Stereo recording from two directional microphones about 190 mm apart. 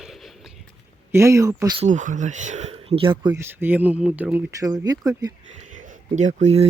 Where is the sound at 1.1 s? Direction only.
15° right (ahead or behind).